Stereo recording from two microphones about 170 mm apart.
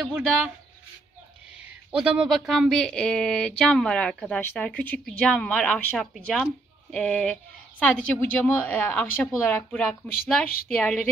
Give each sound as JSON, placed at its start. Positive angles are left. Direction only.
{"t": 0.0, "sound": "speech", "side_deg": 0}
{"t": 1.6, "sound": "a woman's voice", "side_deg": -5}